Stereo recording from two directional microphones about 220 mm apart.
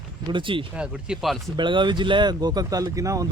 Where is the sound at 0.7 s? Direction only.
5° right (ahead or behind).